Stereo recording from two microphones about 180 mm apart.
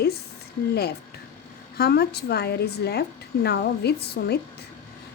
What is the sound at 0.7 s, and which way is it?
Speech, 65° left (ahead or behind).